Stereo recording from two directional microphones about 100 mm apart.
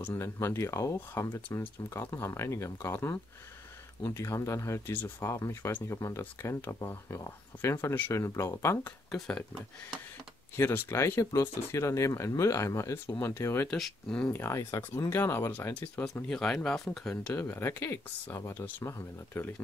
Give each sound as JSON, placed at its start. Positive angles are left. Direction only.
{"t": 0.0, "sound": "speech", "side_deg": 20}
{"t": 10.5, "sound": "speech", "side_deg": 20}
{"t": 13.7, "sound": "speech", "side_deg": 5}
{"t": 14.3, "sound": "speech", "side_deg": 25}
{"t": 17.4, "sound": "speech", "side_deg": 20}